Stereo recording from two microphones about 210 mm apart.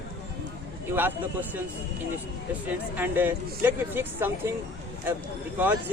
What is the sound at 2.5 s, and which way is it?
Speech, 10° right (ahead or behind).